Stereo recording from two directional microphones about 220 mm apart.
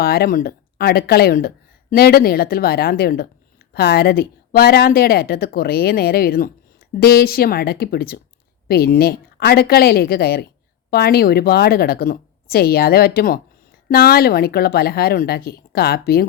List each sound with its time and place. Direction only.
0.0 s a woman's voice: 45° left (ahead or behind)